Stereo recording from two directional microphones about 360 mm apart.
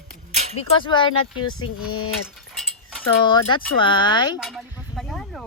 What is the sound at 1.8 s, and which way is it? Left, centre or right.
Speech, left.